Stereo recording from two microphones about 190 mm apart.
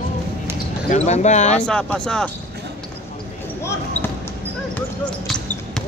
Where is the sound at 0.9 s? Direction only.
35° left (ahead or behind).